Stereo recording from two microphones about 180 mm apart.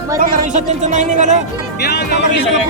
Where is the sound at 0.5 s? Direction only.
40° right (ahead or behind).